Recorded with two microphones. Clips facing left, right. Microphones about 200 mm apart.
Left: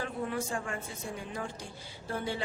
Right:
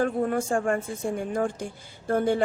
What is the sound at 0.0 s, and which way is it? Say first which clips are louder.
Speech: right 10 dB; 50° right (ahead or behind).